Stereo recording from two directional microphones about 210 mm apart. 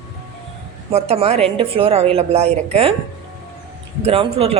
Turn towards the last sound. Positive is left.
turn(degrees=-30)  # may be behind; listen again after turning